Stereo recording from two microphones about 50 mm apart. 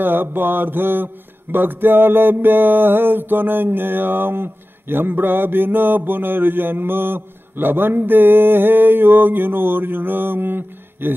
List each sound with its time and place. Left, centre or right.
0.0 s mantra: right